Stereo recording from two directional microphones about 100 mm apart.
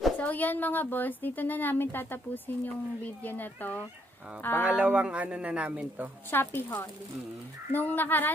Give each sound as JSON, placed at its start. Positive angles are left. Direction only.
{"t": 0.2, "sound": "a woman's voice", "side_deg": 15}
{"t": 4.6, "sound": "speech", "side_deg": -15}
{"t": 6.3, "sound": "a woman's voice", "side_deg": 20}